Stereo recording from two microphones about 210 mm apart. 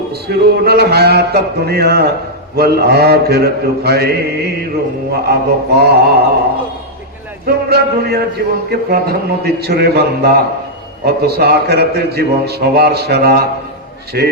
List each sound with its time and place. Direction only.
0.1 s a man's voice: 50° right (ahead or behind)
7.4 s music: 50° right (ahead or behind)
8.7 s a man's voice: 50° right (ahead or behind)